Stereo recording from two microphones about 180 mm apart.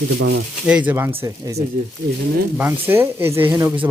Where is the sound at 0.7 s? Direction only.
10° right (ahead or behind).